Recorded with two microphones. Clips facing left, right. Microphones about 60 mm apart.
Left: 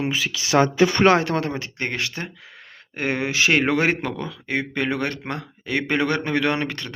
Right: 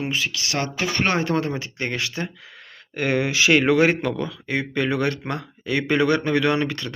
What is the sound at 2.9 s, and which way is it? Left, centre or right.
Speech, left.